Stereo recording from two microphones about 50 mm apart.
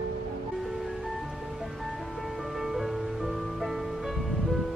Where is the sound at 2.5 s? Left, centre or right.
Centre.